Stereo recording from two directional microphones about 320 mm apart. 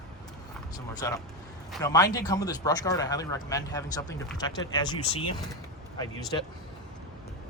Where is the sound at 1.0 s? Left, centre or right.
Centre.